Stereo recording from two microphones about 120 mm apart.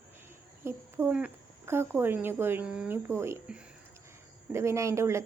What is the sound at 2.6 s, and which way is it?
Speech, 5° right (ahead or behind).